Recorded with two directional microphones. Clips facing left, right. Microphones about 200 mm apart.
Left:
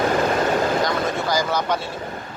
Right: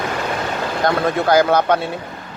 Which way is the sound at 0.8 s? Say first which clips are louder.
Right 6 dB; 60° right (ahead or behind).